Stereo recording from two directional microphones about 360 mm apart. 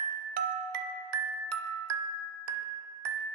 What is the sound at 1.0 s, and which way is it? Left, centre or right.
Glockenspiel, right.